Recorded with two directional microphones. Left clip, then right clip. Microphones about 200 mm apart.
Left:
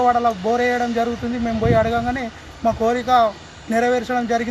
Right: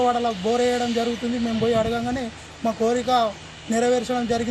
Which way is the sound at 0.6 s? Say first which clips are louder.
Left 2 dB; 5° right (ahead or behind).